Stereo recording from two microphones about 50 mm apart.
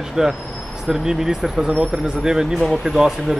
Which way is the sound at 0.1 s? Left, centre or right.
Centre.